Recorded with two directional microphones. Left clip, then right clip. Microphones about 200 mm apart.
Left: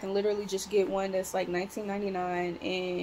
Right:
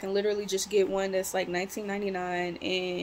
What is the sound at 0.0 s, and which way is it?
Speech, 20° right (ahead or behind).